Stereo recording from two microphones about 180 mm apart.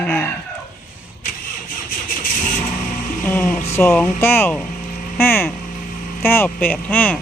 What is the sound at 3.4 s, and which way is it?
Speech, 40° left (ahead or behind).